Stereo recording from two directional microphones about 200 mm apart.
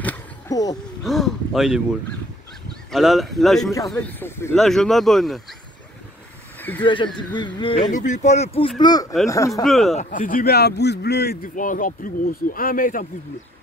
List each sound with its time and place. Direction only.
0.0 s a sound: 10° left (ahead or behind)
1.0 s speech: centre (ahead or behind)
3.7 s speech: 10° left (ahead or behind)
6.8 s speech: 25° left (ahead or behind)
7.9 s speech: 35° left (ahead or behind); by 9.6 s 15° left (ahead or behind)
9.6 s speech: centre (ahead or behind)
9.9 s a man's voice: 40° left (ahead or behind)